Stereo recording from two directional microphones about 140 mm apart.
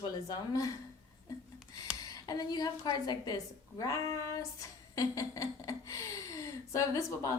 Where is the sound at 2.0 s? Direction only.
25° left (ahead or behind).